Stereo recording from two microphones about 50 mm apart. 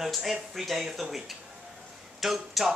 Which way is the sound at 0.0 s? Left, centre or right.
Centre.